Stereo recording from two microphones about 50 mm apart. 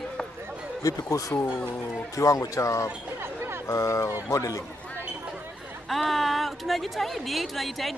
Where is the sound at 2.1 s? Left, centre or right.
Left.